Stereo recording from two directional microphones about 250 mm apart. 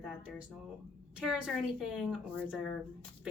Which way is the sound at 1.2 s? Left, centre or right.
Centre.